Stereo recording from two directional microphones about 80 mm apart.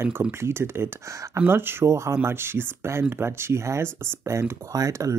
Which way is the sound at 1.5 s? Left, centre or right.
Right.